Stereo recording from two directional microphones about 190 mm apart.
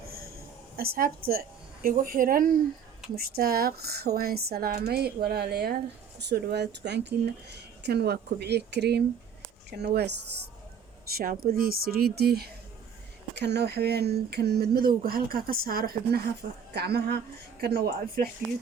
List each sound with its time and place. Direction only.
0.9 s a woman's voice: 50° right (ahead or behind)
11.1 s a woman's voice: 50° right (ahead or behind)